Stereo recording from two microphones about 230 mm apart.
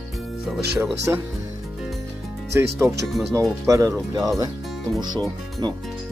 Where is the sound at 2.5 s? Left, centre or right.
Centre.